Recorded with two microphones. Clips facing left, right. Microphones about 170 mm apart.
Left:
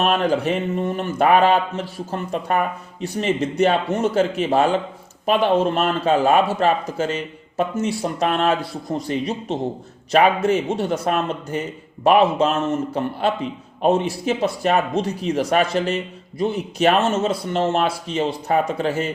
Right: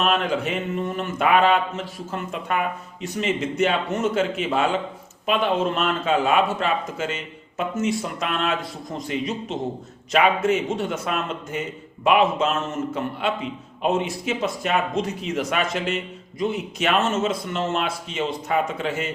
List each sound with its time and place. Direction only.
0.0 s speech: 35° left (ahead or behind)